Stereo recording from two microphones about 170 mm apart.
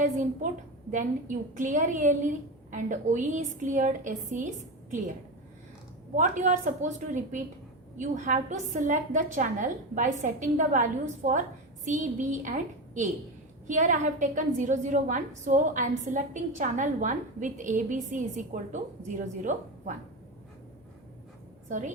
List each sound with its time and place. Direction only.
0.0 s a woman's voice: 50° right (ahead or behind)
6.1 s a woman's voice: 45° right (ahead or behind)
21.7 s a woman's voice: 45° right (ahead or behind)